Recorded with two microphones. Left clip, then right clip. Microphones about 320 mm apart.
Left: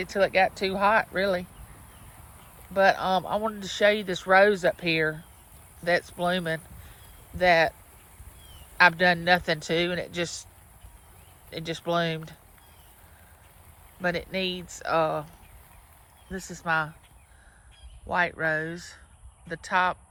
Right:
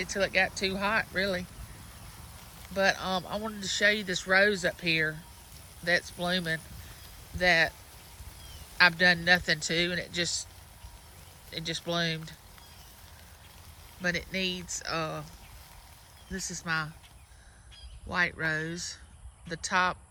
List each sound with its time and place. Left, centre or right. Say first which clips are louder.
0.0 s speech: left 5 dB; centre
2.7 s speech: left 6 dB; centre
8.8 s speech: left 3 dB; centre
11.5 s speech: left 4 dB; centre
14.0 s speech: left 3 dB; centre
16.3 s speech: left 5 dB; centre
18.1 s speech: left 4 dB; centre